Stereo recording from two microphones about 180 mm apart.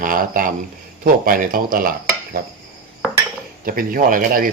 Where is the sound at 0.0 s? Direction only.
50° right (ahead or behind).